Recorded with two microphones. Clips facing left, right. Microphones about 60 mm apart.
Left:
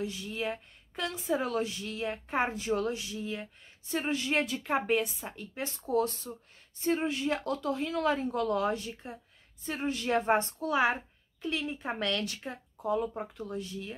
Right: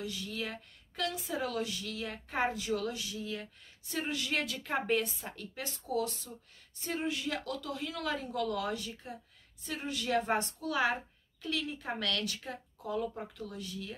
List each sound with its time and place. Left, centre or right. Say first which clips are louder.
0.0 s speech: left 4 dB; left
5.6 s speech: left 5 dB; left